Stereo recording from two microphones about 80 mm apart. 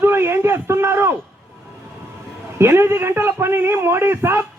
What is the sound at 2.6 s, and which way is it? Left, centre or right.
Speech, right.